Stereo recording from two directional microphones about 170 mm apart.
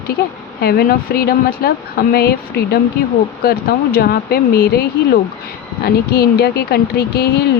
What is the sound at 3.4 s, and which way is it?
Speech, 65° left (ahead or behind).